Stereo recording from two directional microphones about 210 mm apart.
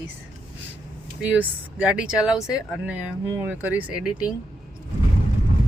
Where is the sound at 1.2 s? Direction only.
5° right (ahead or behind).